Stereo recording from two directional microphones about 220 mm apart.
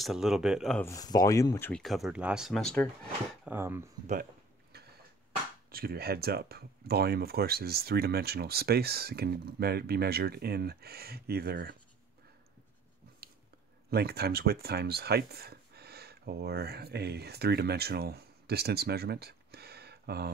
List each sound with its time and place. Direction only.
0.0 s speech: centre (ahead or behind)
0.8 s speech: 15° left (ahead or behind)
3.4 s speech: 10° right (ahead or behind)
4.7 s a sound: 45° right (ahead or behind)
5.7 s speech: 45° right (ahead or behind)
13.8 s speech: 45° right (ahead or behind)